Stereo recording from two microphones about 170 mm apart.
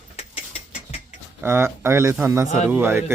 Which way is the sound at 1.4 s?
15° right (ahead or behind).